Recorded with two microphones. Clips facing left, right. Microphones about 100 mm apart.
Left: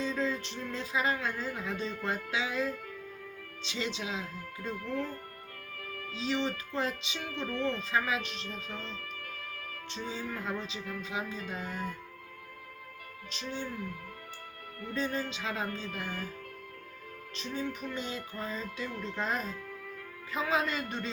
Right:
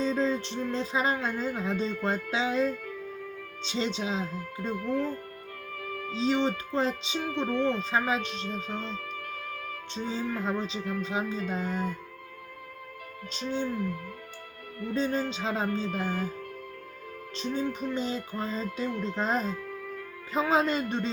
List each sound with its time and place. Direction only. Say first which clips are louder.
0.0 s music: right 5 dB; 30° right (ahead or behind)
6.1 s music: right 6 dB; 30° right (ahead or behind)
9.9 s music: right 6 dB; 30° right (ahead or behind)
13.3 s music: right 7 dB; 30° right (ahead or behind)
14.9 s music: right 5 dB; 30° right (ahead or behind)
17.3 s music: right 6 dB; 30° right (ahead or behind)